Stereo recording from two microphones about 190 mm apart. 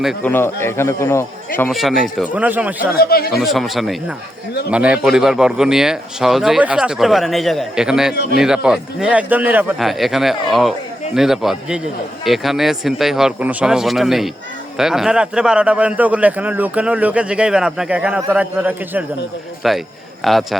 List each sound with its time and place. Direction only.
0.0 s a man's voice: 5° left (ahead or behind)
2.9 s speech: 55° left (ahead or behind)
3.3 s a man's voice: centre (ahead or behind)
8.1 s a man's voice: 60° left (ahead or behind)
8.4 s a man's voice: 5° right (ahead or behind)